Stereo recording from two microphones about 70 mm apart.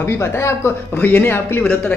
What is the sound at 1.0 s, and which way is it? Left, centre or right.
Speech, left.